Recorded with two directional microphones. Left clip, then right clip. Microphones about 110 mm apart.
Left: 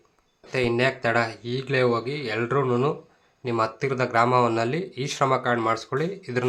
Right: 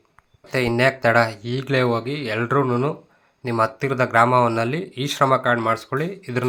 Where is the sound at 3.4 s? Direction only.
30° right (ahead or behind).